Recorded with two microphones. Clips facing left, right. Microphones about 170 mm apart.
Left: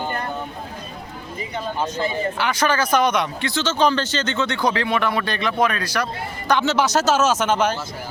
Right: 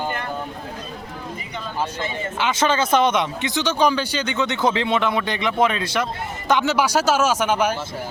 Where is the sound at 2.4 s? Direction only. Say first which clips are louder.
Right 2 dB; 25° right (ahead or behind).